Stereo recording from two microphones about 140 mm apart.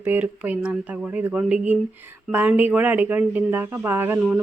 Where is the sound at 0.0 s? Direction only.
10° right (ahead or behind).